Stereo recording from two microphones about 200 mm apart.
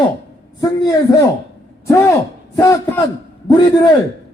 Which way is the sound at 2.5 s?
15° left (ahead or behind).